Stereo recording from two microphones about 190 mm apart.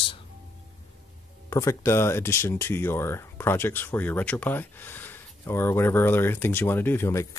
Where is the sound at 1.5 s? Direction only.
15° left (ahead or behind).